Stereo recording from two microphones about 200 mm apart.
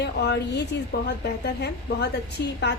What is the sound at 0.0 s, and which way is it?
A woman's voice, 55° left (ahead or behind).